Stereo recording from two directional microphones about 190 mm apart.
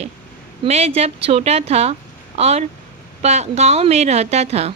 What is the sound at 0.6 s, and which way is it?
A woman's voice, 35° right (ahead or behind).